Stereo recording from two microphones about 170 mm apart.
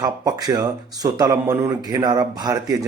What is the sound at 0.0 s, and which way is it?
Speech, 20° right (ahead or behind).